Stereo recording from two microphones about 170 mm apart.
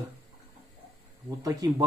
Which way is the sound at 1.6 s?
20° right (ahead or behind).